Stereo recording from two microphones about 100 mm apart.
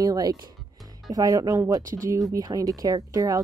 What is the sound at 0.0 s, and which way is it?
Speech, 40° right (ahead or behind).